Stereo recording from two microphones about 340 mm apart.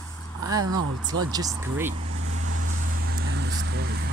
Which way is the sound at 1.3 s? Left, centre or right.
Centre.